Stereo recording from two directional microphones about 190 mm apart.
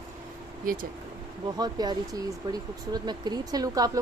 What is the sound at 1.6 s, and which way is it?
Speech, 20° right (ahead or behind).